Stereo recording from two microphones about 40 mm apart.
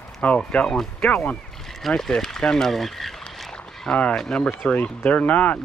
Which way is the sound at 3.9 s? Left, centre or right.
Left.